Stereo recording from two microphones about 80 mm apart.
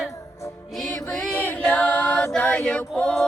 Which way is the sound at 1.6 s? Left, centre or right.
Left.